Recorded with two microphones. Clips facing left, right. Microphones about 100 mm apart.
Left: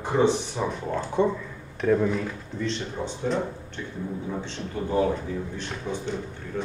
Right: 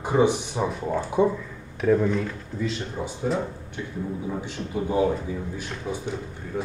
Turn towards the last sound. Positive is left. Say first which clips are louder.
# even
turn(degrees=-10)  # may be behind; listen again after turning